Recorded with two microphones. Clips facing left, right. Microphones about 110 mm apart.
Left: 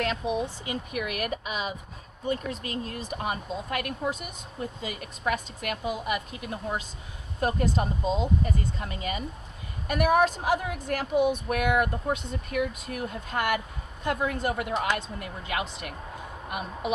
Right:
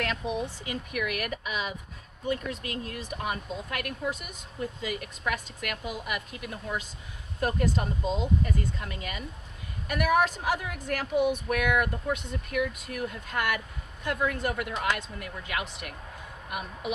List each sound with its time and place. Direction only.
0.0 s speech: 20° left (ahead or behind)